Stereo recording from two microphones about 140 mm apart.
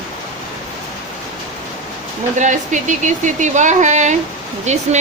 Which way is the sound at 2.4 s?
60° right (ahead or behind).